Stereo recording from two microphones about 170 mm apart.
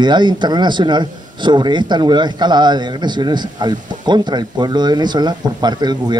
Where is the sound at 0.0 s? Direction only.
25° right (ahead or behind).